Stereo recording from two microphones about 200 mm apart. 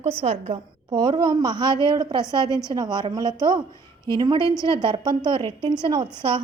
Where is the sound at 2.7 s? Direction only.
20° right (ahead or behind).